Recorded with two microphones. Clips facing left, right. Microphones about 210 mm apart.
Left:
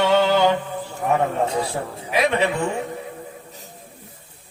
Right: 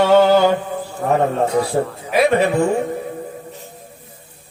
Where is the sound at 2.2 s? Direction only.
45° right (ahead or behind).